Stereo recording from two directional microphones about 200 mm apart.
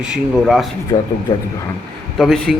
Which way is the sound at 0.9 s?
20° left (ahead or behind).